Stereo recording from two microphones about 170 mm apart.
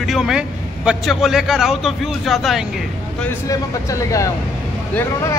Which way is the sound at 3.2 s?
20° left (ahead or behind).